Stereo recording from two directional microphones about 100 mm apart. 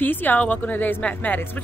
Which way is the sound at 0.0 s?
20° left (ahead or behind).